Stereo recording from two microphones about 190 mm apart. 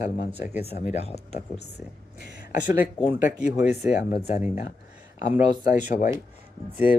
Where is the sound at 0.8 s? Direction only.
35° left (ahead or behind).